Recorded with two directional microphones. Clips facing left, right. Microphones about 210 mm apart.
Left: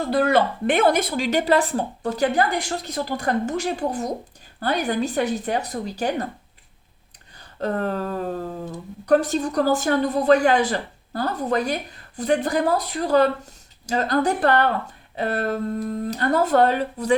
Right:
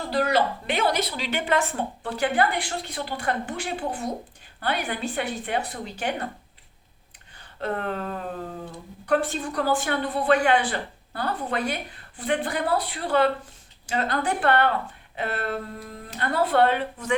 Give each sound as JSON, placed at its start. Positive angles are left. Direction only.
{"t": 0.1, "sound": "a woman's voice", "side_deg": 55}
{"t": 7.3, "sound": "a sound", "side_deg": 40}
{"t": 9.0, "sound": "a woman's voice", "side_deg": 40}